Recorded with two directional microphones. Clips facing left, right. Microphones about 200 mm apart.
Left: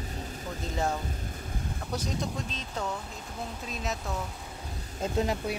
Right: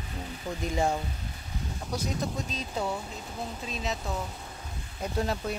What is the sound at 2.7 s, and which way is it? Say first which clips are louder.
Speech: right 3 dB; 10° right (ahead or behind).